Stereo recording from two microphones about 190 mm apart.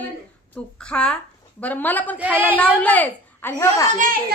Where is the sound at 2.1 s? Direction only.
10° right (ahead or behind).